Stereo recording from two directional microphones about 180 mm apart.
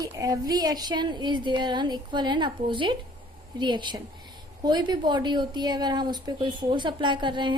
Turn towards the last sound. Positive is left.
turn(degrees=-25)  # may be behind; listen again after turning